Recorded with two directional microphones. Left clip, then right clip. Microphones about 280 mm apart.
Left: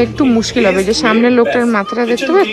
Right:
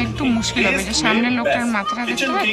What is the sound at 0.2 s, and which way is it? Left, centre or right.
Speech, centre.